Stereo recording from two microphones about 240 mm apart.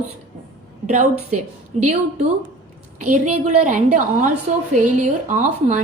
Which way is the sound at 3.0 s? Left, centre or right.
Right.